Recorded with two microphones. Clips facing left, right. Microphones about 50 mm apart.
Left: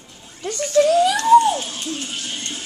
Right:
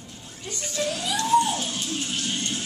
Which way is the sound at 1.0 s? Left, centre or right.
Left.